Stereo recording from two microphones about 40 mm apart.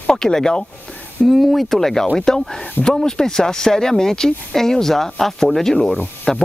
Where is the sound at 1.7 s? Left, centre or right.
Centre.